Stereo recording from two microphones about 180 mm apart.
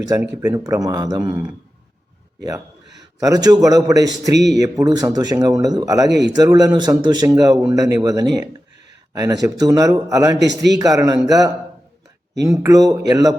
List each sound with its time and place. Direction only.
0.4 s speech: 20° right (ahead or behind)
3.2 s speech: 20° right (ahead or behind)
6.1 s speech: 70° right (ahead or behind)
6.3 s speech: 20° right (ahead or behind)